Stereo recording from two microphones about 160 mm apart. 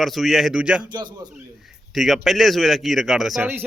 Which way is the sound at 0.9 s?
25° right (ahead or behind).